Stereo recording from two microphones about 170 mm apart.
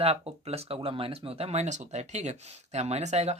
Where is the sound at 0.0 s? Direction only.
35° right (ahead or behind).